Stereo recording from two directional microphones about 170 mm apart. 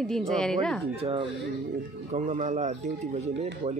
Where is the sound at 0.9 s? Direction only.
35° right (ahead or behind).